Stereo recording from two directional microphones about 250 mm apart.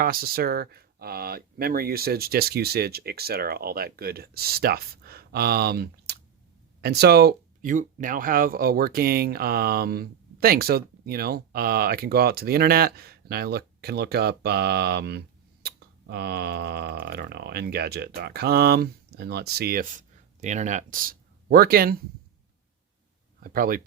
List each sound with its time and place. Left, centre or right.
0.0 s speech: right
15.6 s a sound: right
23.4 s speech: right